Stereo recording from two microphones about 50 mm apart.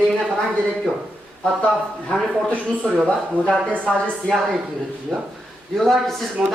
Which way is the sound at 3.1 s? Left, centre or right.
Left.